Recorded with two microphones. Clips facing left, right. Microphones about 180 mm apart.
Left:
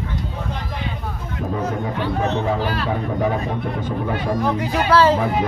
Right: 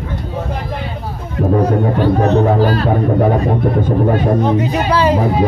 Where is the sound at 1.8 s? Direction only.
40° right (ahead or behind).